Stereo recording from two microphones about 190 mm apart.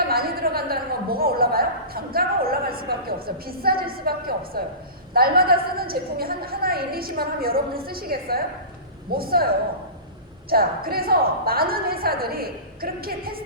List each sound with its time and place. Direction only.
0.0 s a sound: 55° right (ahead or behind)
5.1 s a woman's voice: 55° right (ahead or behind)
10.5 s a woman's voice: 55° right (ahead or behind)